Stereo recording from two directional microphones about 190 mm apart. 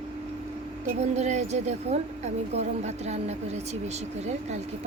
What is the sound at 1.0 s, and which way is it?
Speech, 35° right (ahead or behind).